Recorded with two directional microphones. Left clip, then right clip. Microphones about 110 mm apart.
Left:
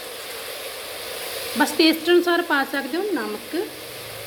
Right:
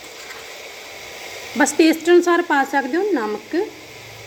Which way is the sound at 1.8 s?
5° right (ahead or behind).